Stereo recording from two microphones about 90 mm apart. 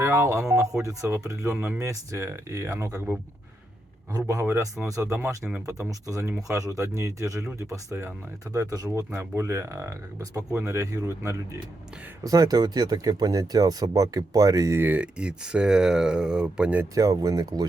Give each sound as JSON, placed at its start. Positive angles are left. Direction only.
{"t": 0.0, "sound": "speech", "side_deg": -30}
{"t": 4.3, "sound": "speech", "side_deg": -30}
{"t": 5.4, "sound": "speech", "side_deg": -15}
{"t": 5.9, "sound": "speech", "side_deg": -40}
{"t": 12.2, "sound": "speech", "side_deg": -40}
{"t": 14.8, "sound": "speech", "side_deg": -20}
{"t": 16.9, "sound": "speech", "side_deg": -40}